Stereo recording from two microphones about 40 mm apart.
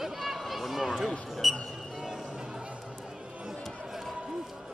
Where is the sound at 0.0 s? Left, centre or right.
Centre.